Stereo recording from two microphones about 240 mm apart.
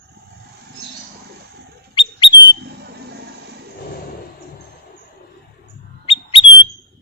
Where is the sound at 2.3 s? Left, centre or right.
Right.